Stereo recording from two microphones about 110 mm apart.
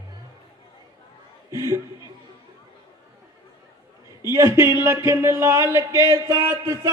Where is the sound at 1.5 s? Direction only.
30° right (ahead or behind).